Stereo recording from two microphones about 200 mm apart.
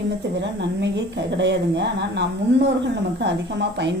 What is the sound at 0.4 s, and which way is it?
A woman's voice, 60° right (ahead or behind).